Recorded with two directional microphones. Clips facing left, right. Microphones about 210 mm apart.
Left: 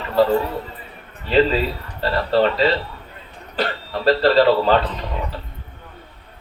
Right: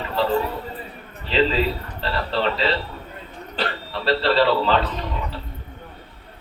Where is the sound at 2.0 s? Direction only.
45° left (ahead or behind).